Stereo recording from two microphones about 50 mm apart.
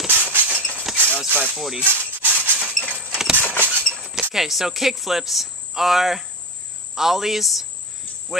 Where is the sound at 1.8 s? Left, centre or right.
Right.